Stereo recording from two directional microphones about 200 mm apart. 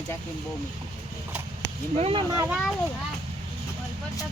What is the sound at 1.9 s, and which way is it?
Speech, 30° right (ahead or behind).